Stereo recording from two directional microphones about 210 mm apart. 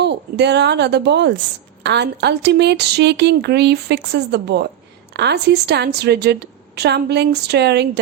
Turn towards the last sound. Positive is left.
turn(degrees=-55)  # may be behind; listen again after turning